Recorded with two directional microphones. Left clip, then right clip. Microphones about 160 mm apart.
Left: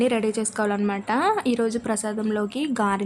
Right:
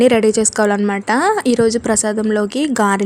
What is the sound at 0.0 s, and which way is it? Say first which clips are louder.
A woman's voice: right 11 dB; 45° right (ahead or behind).